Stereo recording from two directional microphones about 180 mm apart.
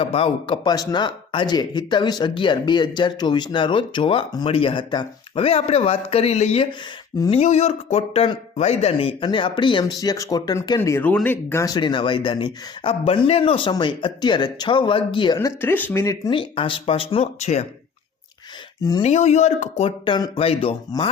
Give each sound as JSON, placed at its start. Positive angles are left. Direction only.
{"t": 0.0, "sound": "speech", "side_deg": 30}
{"t": 15.4, "sound": "speech", "side_deg": 10}
{"t": 19.0, "sound": "speech", "side_deg": 40}
{"t": 20.1, "sound": "speech", "side_deg": 25}